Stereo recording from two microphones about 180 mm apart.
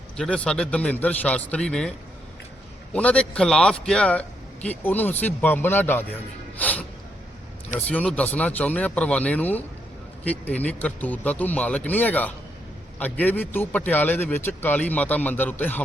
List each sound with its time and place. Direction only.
0.2 s speech: 5° left (ahead or behind)
2.9 s a man's voice: 5° left (ahead or behind)
6.6 s snort: 10° left (ahead or behind)
7.9 s a man's voice: 5° left (ahead or behind)